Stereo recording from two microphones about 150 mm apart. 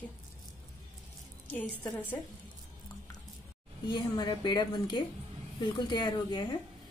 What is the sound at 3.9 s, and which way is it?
A woman's voice, 30° left (ahead or behind).